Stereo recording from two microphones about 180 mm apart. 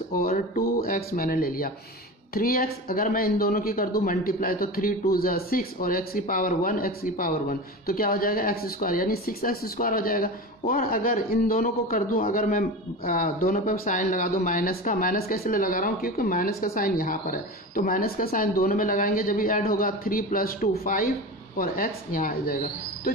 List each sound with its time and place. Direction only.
0.1 s speech: 55° left (ahead or behind)